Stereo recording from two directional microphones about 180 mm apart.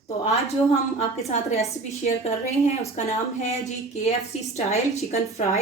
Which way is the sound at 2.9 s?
40° left (ahead or behind).